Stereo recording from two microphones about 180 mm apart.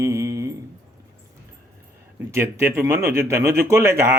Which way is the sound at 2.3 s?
15° right (ahead or behind).